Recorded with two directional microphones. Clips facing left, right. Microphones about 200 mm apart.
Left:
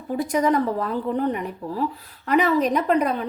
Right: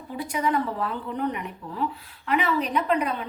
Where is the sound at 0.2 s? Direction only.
45° left (ahead or behind).